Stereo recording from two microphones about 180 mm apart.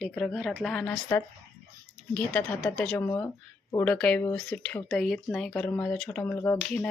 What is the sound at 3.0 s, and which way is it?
Speech, 15° left (ahead or behind).